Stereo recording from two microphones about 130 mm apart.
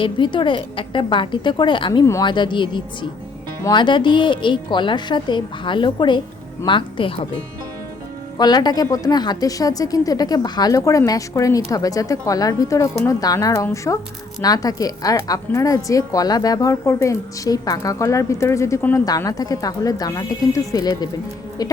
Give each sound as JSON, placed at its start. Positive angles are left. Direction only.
{"t": 0.0, "sound": "a woman's voice", "side_deg": 40}
{"t": 8.4, "sound": "a woman's voice", "side_deg": 30}
{"t": 19.0, "sound": "a woman's voice", "side_deg": 30}